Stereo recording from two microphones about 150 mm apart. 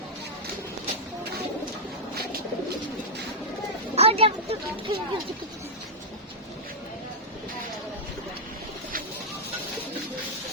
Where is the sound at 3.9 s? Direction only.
40° right (ahead or behind).